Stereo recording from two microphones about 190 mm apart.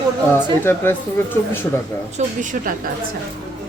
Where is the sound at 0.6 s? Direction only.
10° left (ahead or behind).